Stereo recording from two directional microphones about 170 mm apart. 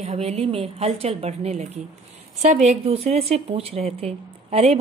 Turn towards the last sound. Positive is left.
turn(degrees=-35)  # may be behind; listen again after turning